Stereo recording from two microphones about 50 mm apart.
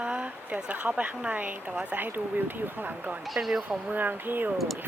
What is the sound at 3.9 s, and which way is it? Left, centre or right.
Speech, right.